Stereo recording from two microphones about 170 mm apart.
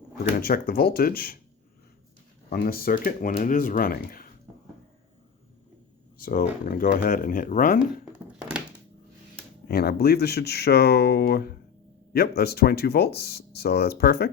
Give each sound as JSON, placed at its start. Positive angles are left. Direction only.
{"t": 0.3, "sound": "speech", "side_deg": 60}
{"t": 2.5, "sound": "speech", "side_deg": 60}
{"t": 6.1, "sound": "speech", "side_deg": 60}
{"t": 8.3, "sound": "a sound", "side_deg": -5}
{"t": 9.6, "sound": "speech", "side_deg": 65}